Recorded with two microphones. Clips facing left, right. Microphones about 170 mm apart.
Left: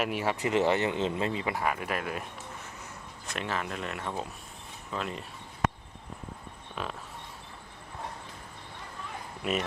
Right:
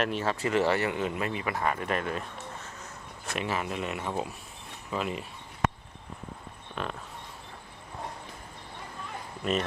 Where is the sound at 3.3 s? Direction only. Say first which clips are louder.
Right 2 dB; 5° right (ahead or behind).